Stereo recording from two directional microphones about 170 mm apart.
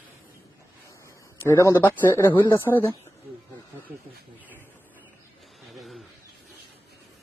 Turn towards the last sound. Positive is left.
turn(degrees=0)  # may be behind; listen again after turning